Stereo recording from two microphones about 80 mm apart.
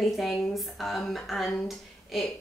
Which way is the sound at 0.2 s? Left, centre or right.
Centre.